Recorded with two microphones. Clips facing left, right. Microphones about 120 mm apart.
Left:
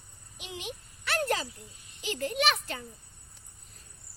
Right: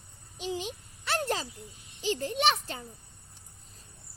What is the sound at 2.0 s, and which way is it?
Speech, 30° right (ahead or behind).